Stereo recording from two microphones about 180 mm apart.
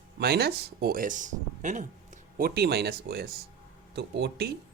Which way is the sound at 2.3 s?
60° right (ahead or behind).